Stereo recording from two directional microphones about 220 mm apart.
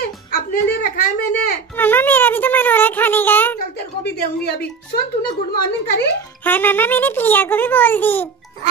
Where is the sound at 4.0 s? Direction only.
45° left (ahead or behind).